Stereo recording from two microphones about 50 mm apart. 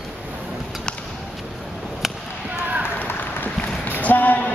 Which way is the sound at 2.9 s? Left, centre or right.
Left.